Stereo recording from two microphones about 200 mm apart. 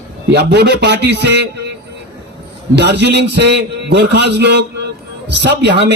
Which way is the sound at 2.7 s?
55° right (ahead or behind).